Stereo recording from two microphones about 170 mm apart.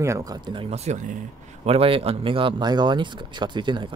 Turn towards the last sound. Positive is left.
turn(degrees=-25)  # may be behind; listen again after turning